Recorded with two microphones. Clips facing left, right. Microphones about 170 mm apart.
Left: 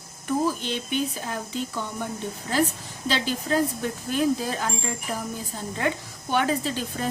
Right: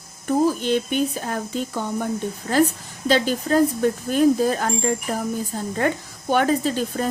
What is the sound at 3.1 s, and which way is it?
A woman's voice, 45° right (ahead or behind).